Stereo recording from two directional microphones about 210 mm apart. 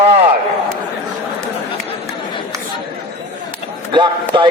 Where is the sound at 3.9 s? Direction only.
25° right (ahead or behind).